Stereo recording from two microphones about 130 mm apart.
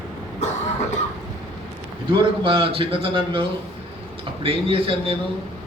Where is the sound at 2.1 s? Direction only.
45° right (ahead or behind).